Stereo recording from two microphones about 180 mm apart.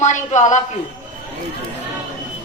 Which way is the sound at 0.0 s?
40° left (ahead or behind).